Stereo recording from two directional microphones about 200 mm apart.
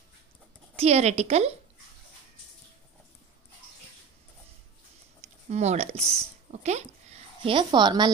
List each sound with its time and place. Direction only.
0.7 s a woman's voice: 30° right (ahead or behind)
5.5 s speech: 35° right (ahead or behind)